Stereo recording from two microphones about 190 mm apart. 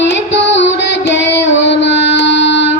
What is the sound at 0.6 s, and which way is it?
Music, 70° left (ahead or behind).